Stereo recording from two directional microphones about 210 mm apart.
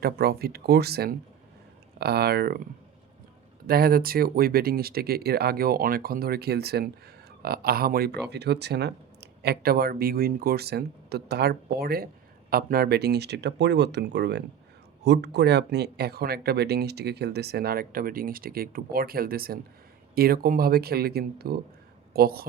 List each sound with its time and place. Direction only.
0.0 s speech: 50° right (ahead or behind)
3.7 s speech: 45° right (ahead or behind)